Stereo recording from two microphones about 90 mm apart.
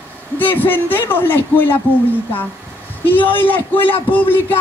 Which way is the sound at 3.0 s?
20° left (ahead or behind).